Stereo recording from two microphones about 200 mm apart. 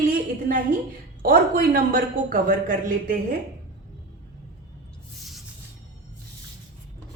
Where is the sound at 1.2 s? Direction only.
45° right (ahead or behind).